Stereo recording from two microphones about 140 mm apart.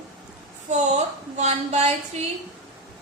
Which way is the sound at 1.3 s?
55° right (ahead or behind).